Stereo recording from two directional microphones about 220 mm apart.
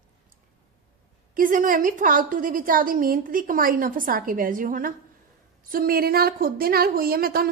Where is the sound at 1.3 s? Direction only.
40° right (ahead or behind).